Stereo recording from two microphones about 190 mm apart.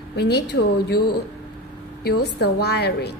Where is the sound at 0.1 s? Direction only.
60° left (ahead or behind).